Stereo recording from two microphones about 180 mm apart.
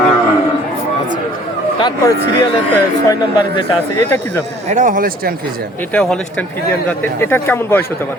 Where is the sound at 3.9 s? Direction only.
10° left (ahead or behind).